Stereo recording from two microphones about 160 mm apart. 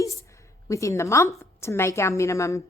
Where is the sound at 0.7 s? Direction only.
20° left (ahead or behind).